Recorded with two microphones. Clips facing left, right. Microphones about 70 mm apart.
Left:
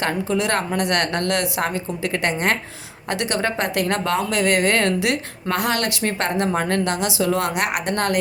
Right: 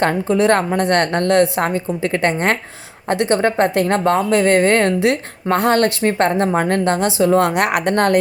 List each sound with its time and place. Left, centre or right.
0.0 s a woman's voice: right